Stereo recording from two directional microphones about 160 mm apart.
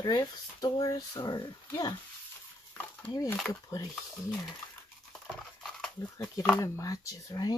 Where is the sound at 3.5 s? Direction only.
20° left (ahead or behind).